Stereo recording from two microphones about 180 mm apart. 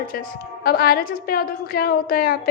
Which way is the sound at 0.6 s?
55° left (ahead or behind).